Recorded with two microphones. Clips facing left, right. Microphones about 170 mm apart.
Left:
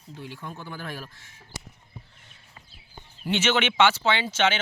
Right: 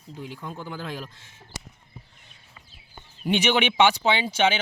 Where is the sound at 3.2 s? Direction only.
15° right (ahead or behind).